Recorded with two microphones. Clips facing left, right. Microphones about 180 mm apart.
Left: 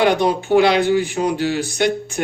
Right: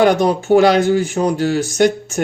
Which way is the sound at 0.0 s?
45° right (ahead or behind).